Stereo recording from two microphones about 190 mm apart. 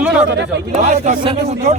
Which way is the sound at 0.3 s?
70° right (ahead or behind).